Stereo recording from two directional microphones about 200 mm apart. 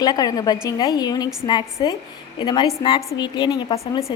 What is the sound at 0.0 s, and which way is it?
A woman's voice, 20° left (ahead or behind).